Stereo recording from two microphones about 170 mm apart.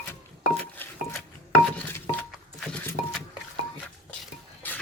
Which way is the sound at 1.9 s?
15° left (ahead or behind).